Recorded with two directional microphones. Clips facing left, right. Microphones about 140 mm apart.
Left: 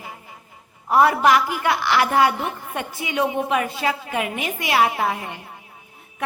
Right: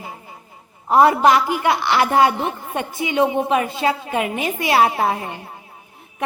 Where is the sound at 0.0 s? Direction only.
30° right (ahead or behind).